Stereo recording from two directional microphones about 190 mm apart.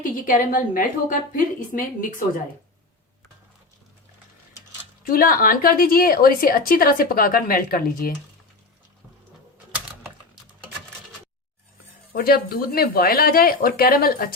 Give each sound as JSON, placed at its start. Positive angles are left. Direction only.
{"t": 0.0, "sound": "a woman's voice", "side_deg": 45}
{"t": 5.0, "sound": "a woman's voice", "side_deg": 50}
{"t": 12.1, "sound": "a woman's voice", "side_deg": 50}